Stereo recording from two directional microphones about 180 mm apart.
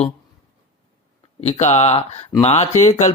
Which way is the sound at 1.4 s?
35° left (ahead or behind).